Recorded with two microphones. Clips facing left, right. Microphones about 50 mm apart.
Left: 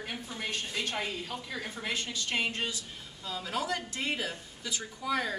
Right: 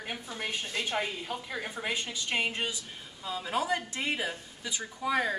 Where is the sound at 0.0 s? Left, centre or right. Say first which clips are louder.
Right 1 dB; centre.